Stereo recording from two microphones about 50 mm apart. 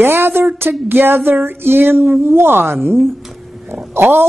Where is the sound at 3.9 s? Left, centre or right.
Right.